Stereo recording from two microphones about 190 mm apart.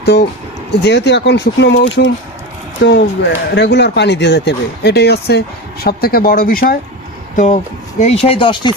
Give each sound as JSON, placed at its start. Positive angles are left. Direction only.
{"t": 0.0, "sound": "speech", "side_deg": 60}
{"t": 2.8, "sound": "speech", "side_deg": 60}
{"t": 7.3, "sound": "speech", "side_deg": 40}